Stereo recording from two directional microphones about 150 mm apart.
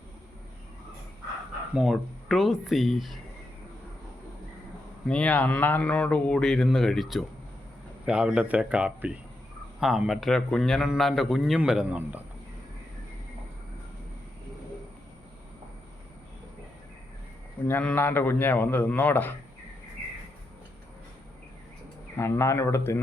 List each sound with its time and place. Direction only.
1.7 s a man's voice: centre (ahead or behind)
5.0 s a man's voice: 5° left (ahead or behind); by 12.2 s 10° right (ahead or behind)
17.7 s speech: 10° left (ahead or behind)
22.2 s speech: 15° left (ahead or behind)